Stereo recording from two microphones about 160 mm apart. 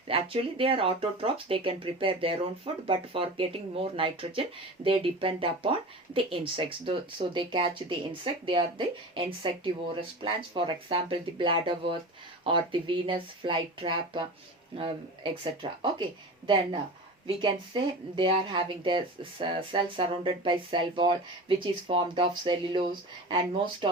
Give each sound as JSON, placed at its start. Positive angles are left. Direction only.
{"t": 0.1, "sound": "speech", "side_deg": -35}
{"t": 17.2, "sound": "speech", "side_deg": -30}